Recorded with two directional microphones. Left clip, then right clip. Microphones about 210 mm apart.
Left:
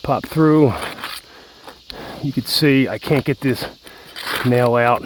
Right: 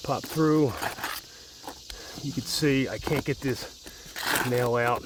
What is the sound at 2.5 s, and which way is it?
Speech, 40° left (ahead or behind).